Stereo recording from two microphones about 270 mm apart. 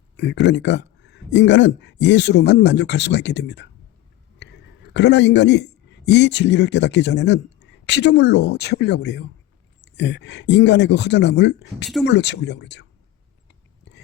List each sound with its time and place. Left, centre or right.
0.4 s a man's voice: left
13.5 s whispering: left